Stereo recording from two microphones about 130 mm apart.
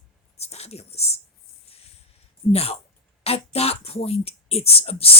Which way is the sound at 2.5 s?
50° left (ahead or behind).